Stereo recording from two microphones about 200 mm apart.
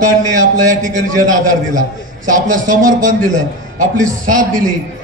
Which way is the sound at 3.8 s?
40° right (ahead or behind).